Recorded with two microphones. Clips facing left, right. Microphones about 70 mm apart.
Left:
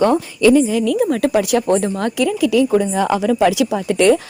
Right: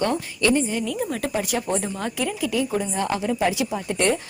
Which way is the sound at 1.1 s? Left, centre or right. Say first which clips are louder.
Left 10 dB; left.